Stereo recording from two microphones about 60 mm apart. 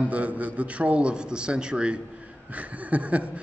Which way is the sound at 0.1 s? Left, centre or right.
Right.